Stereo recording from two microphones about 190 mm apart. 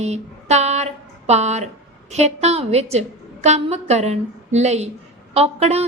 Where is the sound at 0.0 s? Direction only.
35° right (ahead or behind).